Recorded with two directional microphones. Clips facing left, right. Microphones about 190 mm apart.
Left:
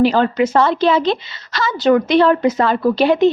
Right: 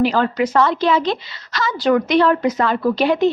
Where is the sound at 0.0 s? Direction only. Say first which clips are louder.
Left 3 dB; 25° left (ahead or behind).